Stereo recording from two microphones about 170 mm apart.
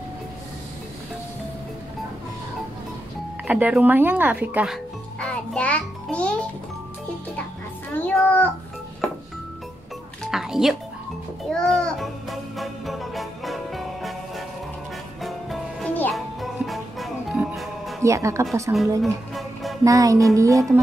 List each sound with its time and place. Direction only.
3.4 s speech: 10° right (ahead or behind)
5.2 s music: 5° left (ahead or behind)
7.9 s a sound: 10° left (ahead or behind)
10.3 s speech: centre (ahead or behind)
11.5 s music: 5° left (ahead or behind)
18.0 s speech: 20° right (ahead or behind)
18.9 s music: centre (ahead or behind)
19.8 s music: 20° right (ahead or behind)